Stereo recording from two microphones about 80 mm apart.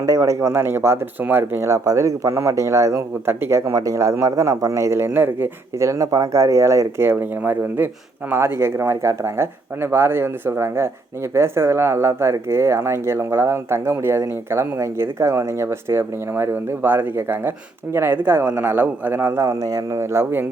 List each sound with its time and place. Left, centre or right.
0.0 s speech: right
1.6 s speech: right
3.2 s a man's voice: right
3.7 s a man's voice: right
19.5 s speech: right